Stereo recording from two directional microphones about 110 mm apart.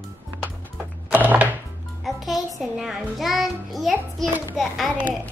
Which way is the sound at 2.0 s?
Centre (ahead or behind).